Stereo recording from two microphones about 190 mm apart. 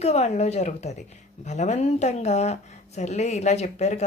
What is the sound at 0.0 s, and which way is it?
Speech, 35° left (ahead or behind).